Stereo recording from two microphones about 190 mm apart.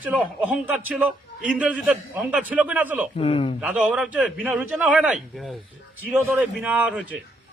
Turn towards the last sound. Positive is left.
turn(degrees=-5)  # may be behind; listen again after turning